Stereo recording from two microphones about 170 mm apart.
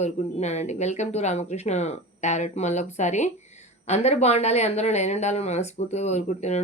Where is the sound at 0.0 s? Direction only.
40° left (ahead or behind).